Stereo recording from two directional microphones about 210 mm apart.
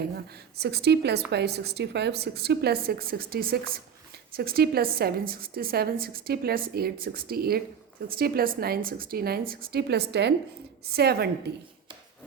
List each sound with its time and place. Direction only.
0.6 s a woman's voice: 50° right (ahead or behind)